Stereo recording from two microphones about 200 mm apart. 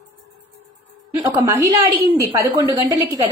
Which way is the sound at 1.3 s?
15° right (ahead or behind).